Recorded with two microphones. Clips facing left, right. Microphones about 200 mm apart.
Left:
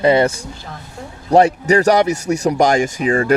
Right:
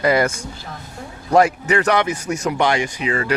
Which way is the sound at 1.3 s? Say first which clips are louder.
Left 3 dB; 35° left (ahead or behind).